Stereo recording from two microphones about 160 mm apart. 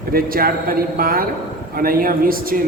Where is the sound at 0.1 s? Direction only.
65° right (ahead or behind).